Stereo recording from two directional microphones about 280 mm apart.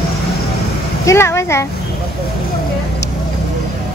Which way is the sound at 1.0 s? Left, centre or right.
Centre.